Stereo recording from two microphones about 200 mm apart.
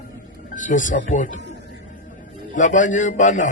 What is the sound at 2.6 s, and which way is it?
Speech, 40° left (ahead or behind).